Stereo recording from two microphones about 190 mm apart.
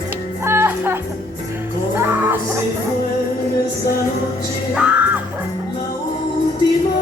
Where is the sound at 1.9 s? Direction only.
10° right (ahead or behind).